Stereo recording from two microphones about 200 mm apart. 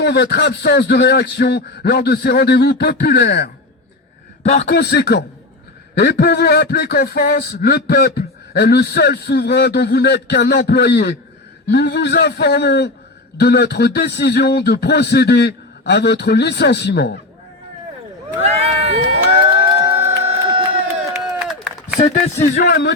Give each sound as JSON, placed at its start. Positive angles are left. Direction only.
{"t": 0.0, "sound": "speech", "side_deg": 55}
{"t": 4.6, "sound": "speech", "side_deg": 55}
{"t": 18.3, "sound": "crowd", "side_deg": -30}
{"t": 19.8, "sound": "crowd", "side_deg": -10}
{"t": 21.2, "sound": "a sound", "side_deg": 0}
{"t": 21.9, "sound": "speech", "side_deg": 35}
{"t": 22.6, "sound": "speech", "side_deg": 55}